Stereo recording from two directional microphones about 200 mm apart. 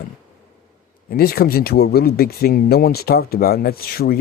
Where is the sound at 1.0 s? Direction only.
50° left (ahead or behind).